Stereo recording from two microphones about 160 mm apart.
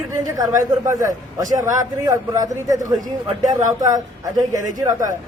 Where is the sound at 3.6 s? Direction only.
20° right (ahead or behind).